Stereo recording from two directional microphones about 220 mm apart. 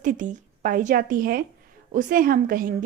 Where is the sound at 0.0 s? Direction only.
35° right (ahead or behind).